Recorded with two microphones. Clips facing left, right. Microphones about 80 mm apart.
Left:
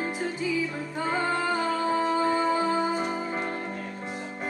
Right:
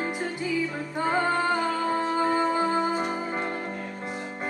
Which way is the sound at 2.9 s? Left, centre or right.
Centre.